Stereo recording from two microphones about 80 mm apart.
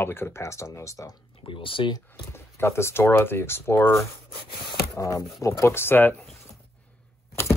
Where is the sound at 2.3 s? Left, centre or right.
Left.